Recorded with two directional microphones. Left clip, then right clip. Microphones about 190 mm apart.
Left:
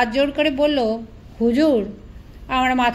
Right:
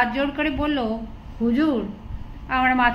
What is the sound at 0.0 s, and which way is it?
A woman's voice, 45° left (ahead or behind).